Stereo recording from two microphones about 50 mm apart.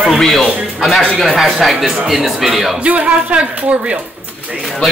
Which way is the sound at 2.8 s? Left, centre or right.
Right.